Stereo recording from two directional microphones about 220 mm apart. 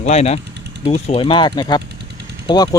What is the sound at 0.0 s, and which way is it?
Speech, 30° left (ahead or behind).